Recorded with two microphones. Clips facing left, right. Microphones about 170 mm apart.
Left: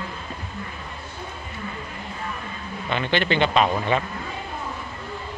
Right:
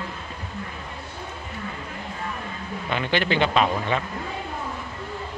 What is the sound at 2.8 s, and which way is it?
Speech, 10° right (ahead or behind).